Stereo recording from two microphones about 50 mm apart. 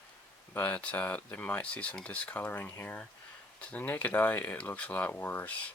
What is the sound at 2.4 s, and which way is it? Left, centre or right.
Speech, left.